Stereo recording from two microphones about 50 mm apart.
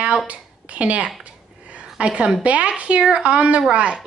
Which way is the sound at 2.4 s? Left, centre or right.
Right.